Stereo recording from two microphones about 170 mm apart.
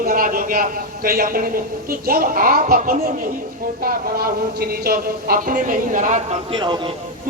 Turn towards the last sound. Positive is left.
turn(degrees=-25)  # may be behind; listen again after turning